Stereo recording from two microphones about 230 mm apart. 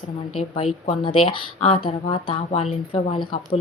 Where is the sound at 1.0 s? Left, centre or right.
Left.